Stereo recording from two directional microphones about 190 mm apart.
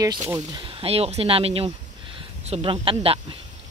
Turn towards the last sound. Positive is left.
turn(degrees=-30)  # may be behind; listen again after turning